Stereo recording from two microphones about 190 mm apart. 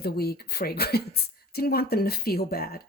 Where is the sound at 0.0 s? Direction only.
55° left (ahead or behind).